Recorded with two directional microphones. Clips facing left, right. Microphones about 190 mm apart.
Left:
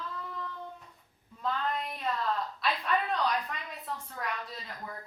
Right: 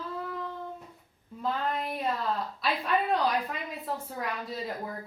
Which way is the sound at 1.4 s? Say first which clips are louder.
Right 2 dB; 5° right (ahead or behind).